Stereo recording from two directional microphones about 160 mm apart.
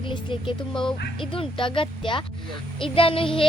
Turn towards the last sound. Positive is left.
turn(degrees=35)  # may be behind; listen again after turning